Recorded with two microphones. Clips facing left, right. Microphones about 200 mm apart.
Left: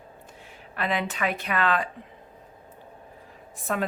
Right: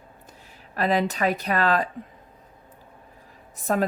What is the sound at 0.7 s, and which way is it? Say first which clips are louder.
Speech: right 5 dB; 40° right (ahead or behind).